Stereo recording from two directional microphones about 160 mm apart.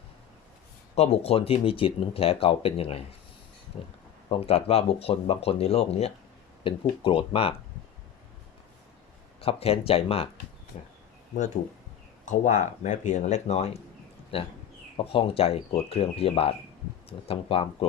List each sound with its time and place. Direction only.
0.9 s speech: 40° left (ahead or behind)
9.4 s speech: 40° left (ahead or behind)
12.2 s speech: 50° left (ahead or behind); by 17.8 s 35° left (ahead or behind)